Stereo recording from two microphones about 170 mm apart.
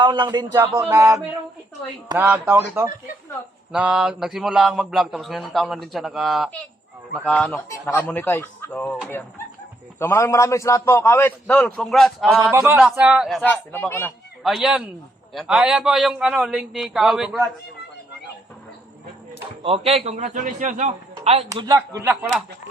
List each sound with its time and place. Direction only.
0.0 s a man's voice: 25° right (ahead or behind); by 12.4 s centre (ahead or behind)
12.5 s speech: 10° right (ahead or behind)
13.4 s a man's voice: 10° left (ahead or behind)
14.4 s speech: 5° right (ahead or behind)
19.6 s a man's voice: 35° right (ahead or behind)
21.5 s a man's voice: 25° right (ahead or behind)
21.8 s speech: 15° right (ahead or behind)